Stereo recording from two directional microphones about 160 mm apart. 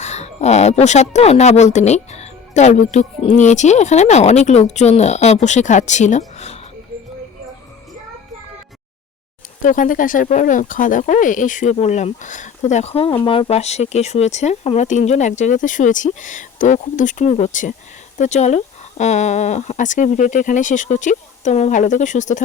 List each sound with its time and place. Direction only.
0.0 s speech: 45° left (ahead or behind)
9.6 s speech: 55° left (ahead or behind)